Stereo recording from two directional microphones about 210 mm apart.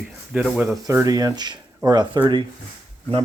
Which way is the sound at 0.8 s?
15° right (ahead or behind).